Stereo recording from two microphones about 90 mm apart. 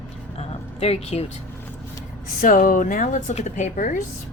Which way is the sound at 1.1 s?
90° left.